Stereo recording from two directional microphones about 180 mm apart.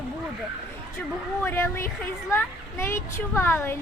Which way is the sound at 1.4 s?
15° left (ahead or behind).